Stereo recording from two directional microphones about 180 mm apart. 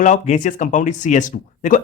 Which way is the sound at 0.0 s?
45° left (ahead or behind).